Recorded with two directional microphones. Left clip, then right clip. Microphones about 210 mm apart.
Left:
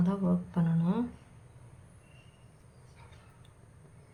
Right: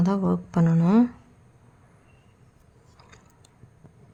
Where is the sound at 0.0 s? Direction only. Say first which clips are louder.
Right 7 dB; 50° right (ahead or behind).